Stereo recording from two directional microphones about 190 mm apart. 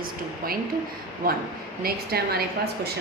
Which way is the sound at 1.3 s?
50° right (ahead or behind).